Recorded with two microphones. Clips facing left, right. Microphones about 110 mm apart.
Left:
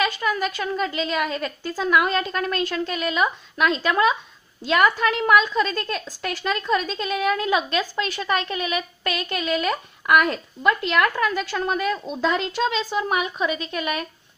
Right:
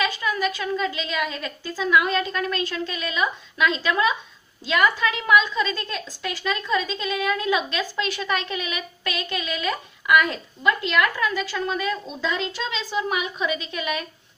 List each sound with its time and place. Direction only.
0.0 s a woman's voice: 50° left (ahead or behind)